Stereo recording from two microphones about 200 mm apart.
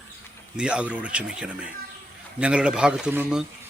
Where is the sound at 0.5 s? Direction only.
5° right (ahead or behind).